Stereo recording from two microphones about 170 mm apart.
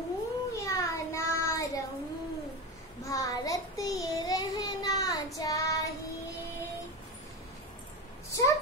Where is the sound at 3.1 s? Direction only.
20° left (ahead or behind).